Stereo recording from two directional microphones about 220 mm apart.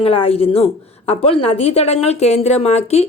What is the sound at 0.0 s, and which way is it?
A woman's voice, 25° left (ahead or behind).